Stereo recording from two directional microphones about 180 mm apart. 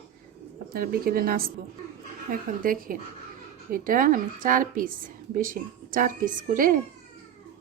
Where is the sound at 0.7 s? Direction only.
55° right (ahead or behind).